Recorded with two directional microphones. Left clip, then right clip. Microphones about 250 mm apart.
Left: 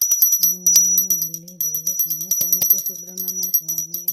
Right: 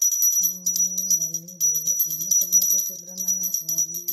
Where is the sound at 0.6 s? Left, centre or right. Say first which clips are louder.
Left 7 dB; left.